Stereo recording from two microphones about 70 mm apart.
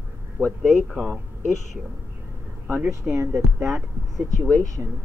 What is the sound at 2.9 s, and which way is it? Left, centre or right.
Speech, right.